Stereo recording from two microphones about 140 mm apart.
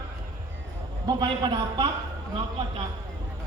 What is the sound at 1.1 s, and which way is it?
Speech, 30° right (ahead or behind).